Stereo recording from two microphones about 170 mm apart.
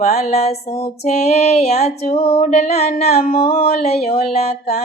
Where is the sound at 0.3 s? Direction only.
40° left (ahead or behind).